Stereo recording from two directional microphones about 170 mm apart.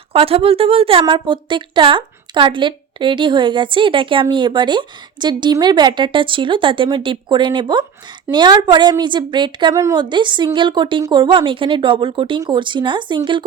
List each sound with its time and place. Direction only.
0.1 s a woman's voice: 35° right (ahead or behind)